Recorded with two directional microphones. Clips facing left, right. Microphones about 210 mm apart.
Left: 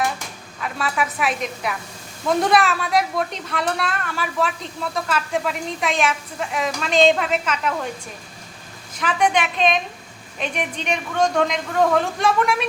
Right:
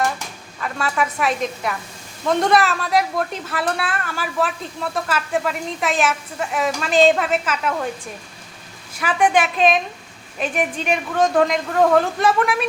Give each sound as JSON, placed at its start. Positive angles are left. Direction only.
{"t": 0.6, "sound": "a woman's voice", "side_deg": 0}
{"t": 9.0, "sound": "a woman's voice", "side_deg": -5}